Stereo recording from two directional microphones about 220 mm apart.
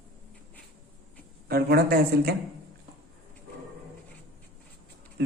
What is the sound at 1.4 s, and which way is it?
Speech, 45° right (ahead or behind).